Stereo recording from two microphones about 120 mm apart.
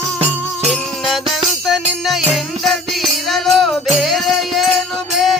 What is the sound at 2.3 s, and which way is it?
Music, centre (ahead or behind).